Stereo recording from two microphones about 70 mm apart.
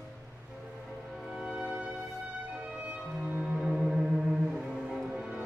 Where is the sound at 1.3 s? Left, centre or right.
Centre.